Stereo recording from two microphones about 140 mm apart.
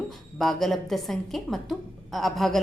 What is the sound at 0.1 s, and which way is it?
A woman's voice, centre (ahead or behind).